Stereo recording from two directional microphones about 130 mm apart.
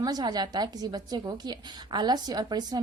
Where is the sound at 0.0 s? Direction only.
30° right (ahead or behind).